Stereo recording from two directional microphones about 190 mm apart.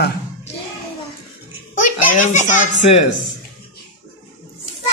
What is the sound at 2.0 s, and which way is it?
Speech, 40° left (ahead or behind).